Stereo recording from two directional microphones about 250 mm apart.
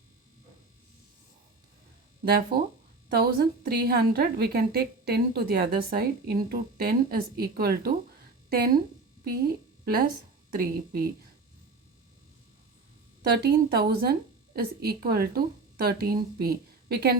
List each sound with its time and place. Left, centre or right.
2.2 s a woman's voice: right
9.8 s a woman's voice: right
13.3 s a woman's voice: right